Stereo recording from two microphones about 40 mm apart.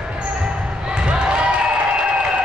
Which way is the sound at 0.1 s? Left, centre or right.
Right.